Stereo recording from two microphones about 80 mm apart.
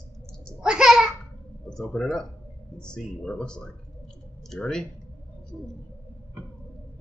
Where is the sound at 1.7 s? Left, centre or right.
Centre.